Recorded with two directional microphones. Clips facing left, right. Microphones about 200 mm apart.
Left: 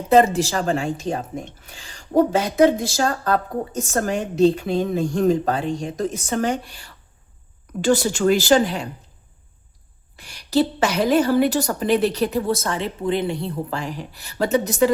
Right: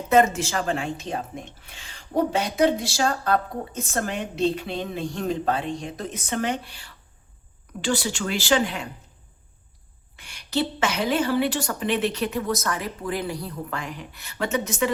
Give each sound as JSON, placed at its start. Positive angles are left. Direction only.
{"t": 0.1, "sound": "a woman's voice", "side_deg": 35}
{"t": 10.2, "sound": "speech", "side_deg": 35}